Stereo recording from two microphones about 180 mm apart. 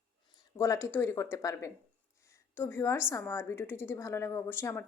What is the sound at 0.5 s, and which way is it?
Speech, 15° left (ahead or behind).